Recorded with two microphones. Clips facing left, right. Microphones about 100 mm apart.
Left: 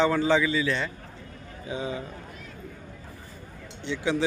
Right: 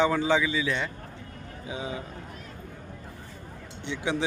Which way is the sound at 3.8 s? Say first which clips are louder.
Left 2 dB; 20° right (ahead or behind).